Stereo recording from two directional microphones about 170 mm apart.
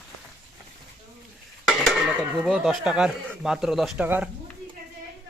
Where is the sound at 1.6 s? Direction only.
Centre (ahead or behind).